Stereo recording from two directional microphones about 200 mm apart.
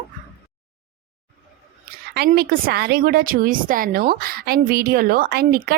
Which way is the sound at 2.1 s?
50° right (ahead or behind).